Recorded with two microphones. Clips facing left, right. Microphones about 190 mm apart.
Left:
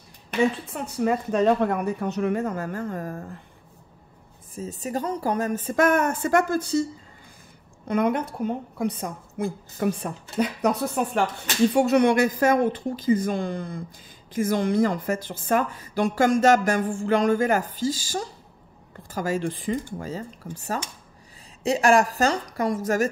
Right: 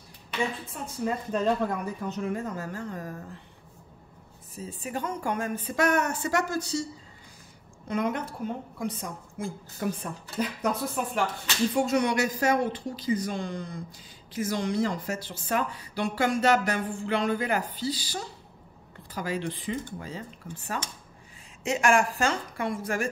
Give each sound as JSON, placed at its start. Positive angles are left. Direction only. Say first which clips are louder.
{"t": 0.7, "sound": "a woman's voice", "louder": "left 3 dB", "side_deg": 70}
{"t": 4.6, "sound": "speech", "louder": "left 5 dB", "side_deg": 40}
{"t": 7.9, "sound": "a woman's voice", "louder": "left 6 dB", "side_deg": 60}
{"t": 11.7, "sound": "a woman's voice", "louder": "left 6 dB", "side_deg": 65}